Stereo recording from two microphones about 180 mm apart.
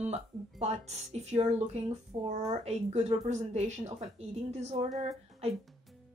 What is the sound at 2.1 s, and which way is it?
Speech, 25° right (ahead or behind).